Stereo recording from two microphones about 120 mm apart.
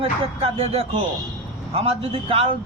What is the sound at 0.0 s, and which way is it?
Speech, 55° right (ahead or behind).